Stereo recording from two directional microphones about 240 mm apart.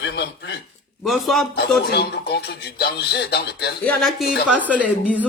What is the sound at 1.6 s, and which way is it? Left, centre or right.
Speech, left.